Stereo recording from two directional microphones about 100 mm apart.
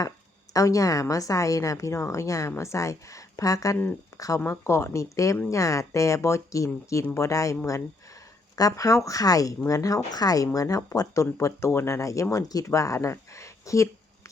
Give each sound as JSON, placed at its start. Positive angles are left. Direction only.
{"t": 0.5, "sound": "speech", "side_deg": 35}
{"t": 4.1, "sound": "a sound", "side_deg": 30}
{"t": 4.4, "sound": "speech", "side_deg": 25}
{"t": 8.5, "sound": "speech", "side_deg": 35}